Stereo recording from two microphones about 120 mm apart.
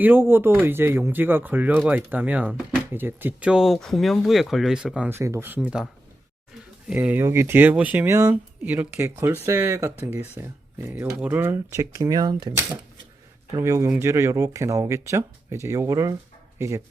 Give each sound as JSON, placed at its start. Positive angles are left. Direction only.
{"t": 0.0, "sound": "speech", "side_deg": -20}
{"t": 5.1, "sound": "speech", "side_deg": -20}
{"t": 5.5, "sound": "speech", "side_deg": -5}
{"t": 13.6, "sound": "speech", "side_deg": -25}